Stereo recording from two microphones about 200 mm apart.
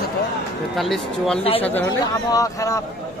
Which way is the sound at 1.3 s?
30° left (ahead or behind).